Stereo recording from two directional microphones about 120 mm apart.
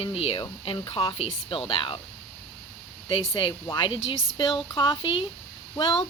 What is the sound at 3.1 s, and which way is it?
Speech, 45° left (ahead or behind).